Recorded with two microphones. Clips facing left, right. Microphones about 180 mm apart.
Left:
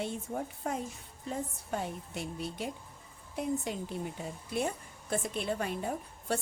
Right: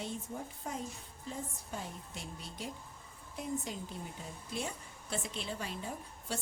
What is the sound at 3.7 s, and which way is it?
A woman's voice, 60° left (ahead or behind).